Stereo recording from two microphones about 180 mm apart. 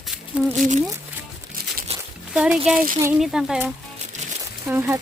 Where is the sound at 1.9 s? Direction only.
35° right (ahead or behind).